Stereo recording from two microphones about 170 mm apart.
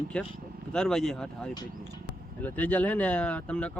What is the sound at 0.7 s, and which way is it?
Speech, 5° left (ahead or behind).